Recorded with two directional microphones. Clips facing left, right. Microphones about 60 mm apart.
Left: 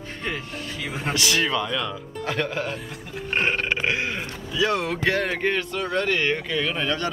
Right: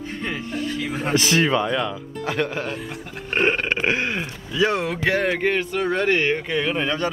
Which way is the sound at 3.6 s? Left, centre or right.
Right.